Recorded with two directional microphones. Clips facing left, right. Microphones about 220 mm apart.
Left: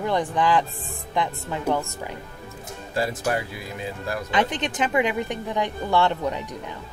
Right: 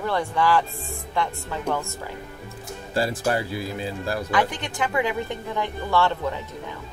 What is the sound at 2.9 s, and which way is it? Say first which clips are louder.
Speech: right 1 dB; 35° right (ahead or behind).